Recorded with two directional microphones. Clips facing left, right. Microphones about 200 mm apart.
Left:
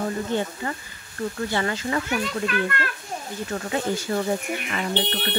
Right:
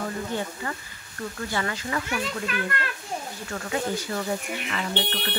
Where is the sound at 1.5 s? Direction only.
30° left (ahead or behind).